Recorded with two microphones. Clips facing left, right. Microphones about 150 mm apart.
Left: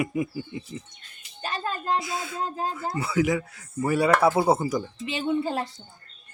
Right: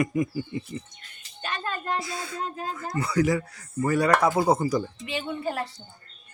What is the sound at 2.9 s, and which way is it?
Speech, 5° left (ahead or behind).